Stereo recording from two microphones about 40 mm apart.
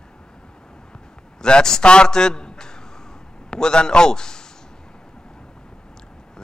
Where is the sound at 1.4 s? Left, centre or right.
Centre.